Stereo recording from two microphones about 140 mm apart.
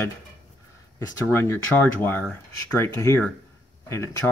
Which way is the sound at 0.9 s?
15° left (ahead or behind).